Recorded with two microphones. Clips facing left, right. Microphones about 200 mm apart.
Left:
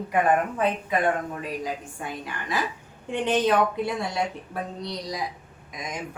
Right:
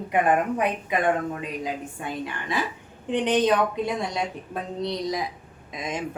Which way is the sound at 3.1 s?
20° right (ahead or behind).